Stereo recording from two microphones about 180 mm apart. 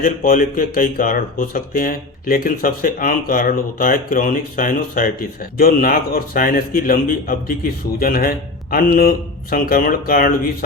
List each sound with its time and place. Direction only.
0.0 s speech: 50° left (ahead or behind)